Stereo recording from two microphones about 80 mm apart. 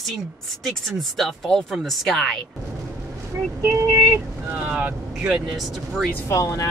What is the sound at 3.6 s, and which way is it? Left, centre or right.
Speech, right.